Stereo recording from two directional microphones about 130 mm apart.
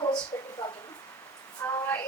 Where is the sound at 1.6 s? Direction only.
20° left (ahead or behind).